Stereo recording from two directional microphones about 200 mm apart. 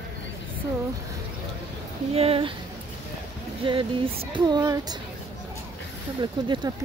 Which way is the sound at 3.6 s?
25° right (ahead or behind).